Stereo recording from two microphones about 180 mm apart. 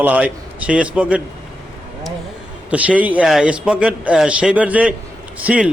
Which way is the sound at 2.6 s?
5° right (ahead or behind).